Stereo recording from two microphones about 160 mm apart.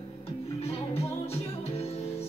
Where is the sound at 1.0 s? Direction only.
40° left (ahead or behind).